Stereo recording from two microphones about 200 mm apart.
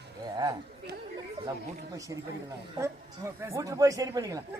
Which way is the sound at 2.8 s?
15° right (ahead or behind).